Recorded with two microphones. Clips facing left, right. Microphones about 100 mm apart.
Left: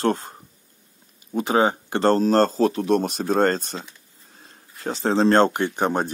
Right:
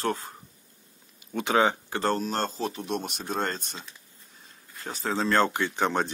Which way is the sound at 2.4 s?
90° left.